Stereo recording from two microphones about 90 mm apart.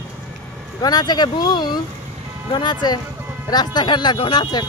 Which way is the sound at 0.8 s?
50° left (ahead or behind).